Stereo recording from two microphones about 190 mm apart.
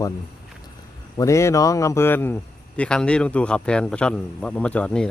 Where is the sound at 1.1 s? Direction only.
15° left (ahead or behind).